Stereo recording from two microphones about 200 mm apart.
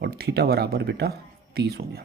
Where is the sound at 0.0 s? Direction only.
55° right (ahead or behind).